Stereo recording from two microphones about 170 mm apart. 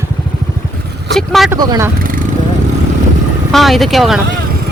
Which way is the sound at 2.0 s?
55° right (ahead or behind).